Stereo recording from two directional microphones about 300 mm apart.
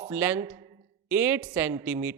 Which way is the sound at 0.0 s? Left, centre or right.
Centre.